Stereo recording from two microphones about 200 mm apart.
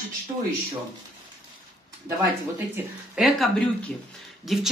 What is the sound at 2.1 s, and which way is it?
Speech, 15° right (ahead or behind).